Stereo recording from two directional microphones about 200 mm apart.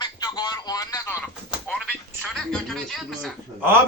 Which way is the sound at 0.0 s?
20° left (ahead or behind).